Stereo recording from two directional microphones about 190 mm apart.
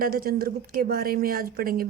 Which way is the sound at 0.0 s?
50° right (ahead or behind).